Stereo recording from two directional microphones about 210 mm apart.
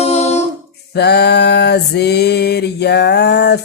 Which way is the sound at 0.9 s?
50° left (ahead or behind).